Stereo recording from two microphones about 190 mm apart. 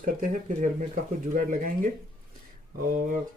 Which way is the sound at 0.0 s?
45° right (ahead or behind).